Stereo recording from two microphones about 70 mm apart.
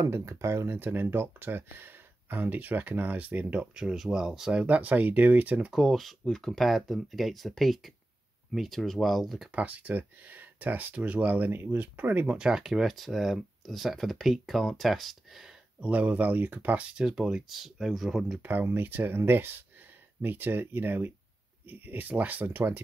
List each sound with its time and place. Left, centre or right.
0.0 s speech: right
3.7 s speech: centre
4.6 s speech: right
5.7 s speech: centre
9.5 s speech: right
12.4 s speech: centre
15.8 s speech: right; by 18.4 s centre
18.4 s speech: right